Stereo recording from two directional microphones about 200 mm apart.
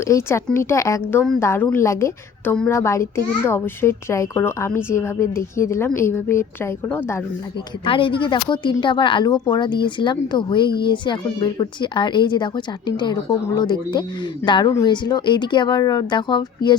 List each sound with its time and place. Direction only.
0.1 s a woman's voice: 15° left (ahead or behind)
7.9 s a woman's voice: 25° left (ahead or behind)